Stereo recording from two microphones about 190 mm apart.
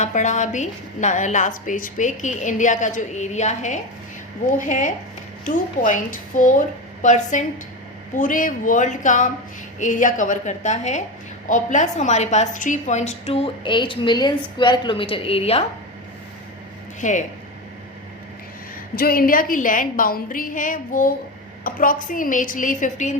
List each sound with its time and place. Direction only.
0.0 s a woman's voice: 40° left (ahead or behind)
17.0 s a woman's voice: 40° left (ahead or behind)
18.9 s a woman's voice: 50° left (ahead or behind)